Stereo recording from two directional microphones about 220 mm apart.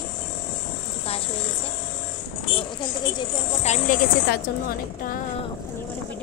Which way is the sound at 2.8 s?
25° left (ahead or behind).